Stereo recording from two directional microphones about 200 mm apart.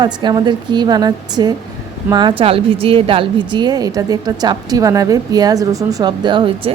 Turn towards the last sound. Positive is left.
turn(degrees=-25)  # may be behind; listen again after turning